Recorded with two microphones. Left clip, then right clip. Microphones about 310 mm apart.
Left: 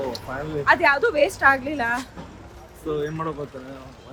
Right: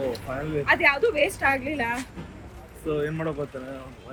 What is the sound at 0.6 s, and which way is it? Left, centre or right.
Speech, centre.